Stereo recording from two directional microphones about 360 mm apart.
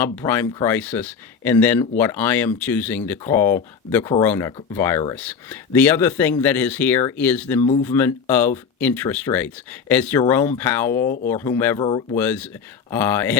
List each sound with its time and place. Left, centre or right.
0.0 s speech: centre
11.0 s speech: left
11.3 s speech: centre